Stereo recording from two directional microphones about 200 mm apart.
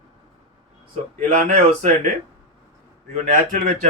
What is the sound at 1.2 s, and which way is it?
Speech, 35° right (ahead or behind).